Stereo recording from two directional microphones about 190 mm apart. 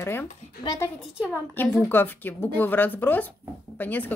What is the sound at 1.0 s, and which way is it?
A woman's voice, centre (ahead or behind).